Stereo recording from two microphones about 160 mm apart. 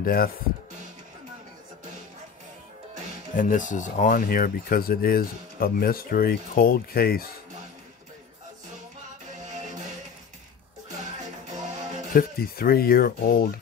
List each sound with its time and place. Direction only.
0.0 s speech: 65° left (ahead or behind)
3.3 s speech: 55° left (ahead or behind); by 7.2 s 70° left (ahead or behind)
9.3 s music: 50° right (ahead or behind)
11.5 s music: 50° right (ahead or behind)
12.1 s speech: 70° left (ahead or behind)